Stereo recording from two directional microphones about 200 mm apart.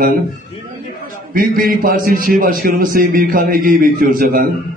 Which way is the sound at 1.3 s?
45° right (ahead or behind).